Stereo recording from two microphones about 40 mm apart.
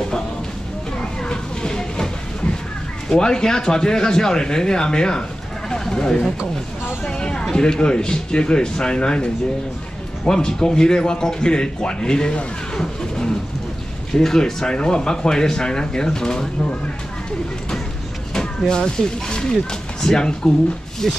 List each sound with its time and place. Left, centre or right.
1.2 s a sound: centre
3.1 s speech: centre
7.1 s a sound: left
7.5 s speech: left
14.1 s speech: centre
18.7 s speech: left